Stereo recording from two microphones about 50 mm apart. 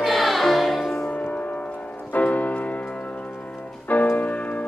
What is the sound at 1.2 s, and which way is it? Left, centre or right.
Music, left.